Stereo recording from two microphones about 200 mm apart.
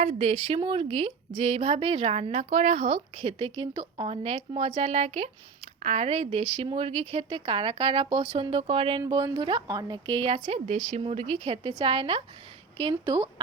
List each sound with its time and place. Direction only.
0.0 s speech: 30° right (ahead or behind)